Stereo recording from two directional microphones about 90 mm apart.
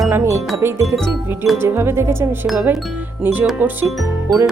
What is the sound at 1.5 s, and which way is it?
Music, 25° right (ahead or behind).